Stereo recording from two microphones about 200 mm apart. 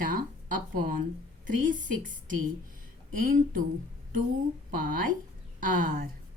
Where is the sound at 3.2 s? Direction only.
45° right (ahead or behind).